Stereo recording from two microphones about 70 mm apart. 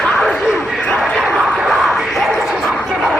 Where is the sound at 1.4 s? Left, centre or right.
Centre.